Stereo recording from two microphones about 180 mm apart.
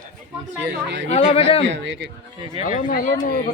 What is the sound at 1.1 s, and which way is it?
Speech, 35° left (ahead or behind).